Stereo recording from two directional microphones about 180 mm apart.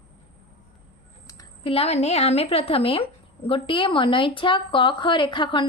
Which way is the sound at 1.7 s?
35° left (ahead or behind).